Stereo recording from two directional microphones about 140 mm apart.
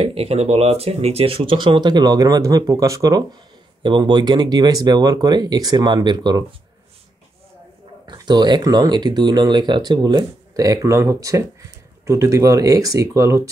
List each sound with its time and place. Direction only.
0.0 s speech: 45° right (ahead or behind); by 6.4 s 30° right (ahead or behind)
8.1 s speech: 30° right (ahead or behind)